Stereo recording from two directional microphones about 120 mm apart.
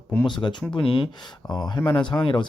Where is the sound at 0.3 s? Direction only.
40° left (ahead or behind).